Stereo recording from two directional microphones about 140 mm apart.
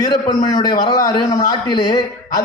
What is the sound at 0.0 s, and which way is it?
A man's voice, 30° left (ahead or behind).